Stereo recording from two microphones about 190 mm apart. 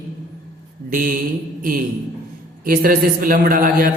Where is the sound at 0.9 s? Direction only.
45° right (ahead or behind).